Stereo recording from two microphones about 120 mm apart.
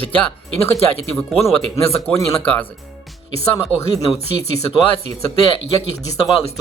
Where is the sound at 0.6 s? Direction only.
55° left (ahead or behind).